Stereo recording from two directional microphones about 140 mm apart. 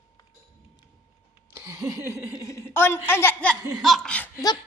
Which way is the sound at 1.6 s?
20° right (ahead or behind).